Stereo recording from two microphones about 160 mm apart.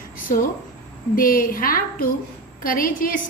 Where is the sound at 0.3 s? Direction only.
65° left (ahead or behind).